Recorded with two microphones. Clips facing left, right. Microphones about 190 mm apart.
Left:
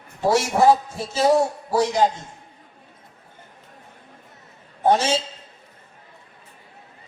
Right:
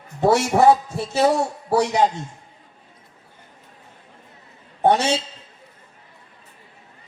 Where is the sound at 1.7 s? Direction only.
65° right (ahead or behind).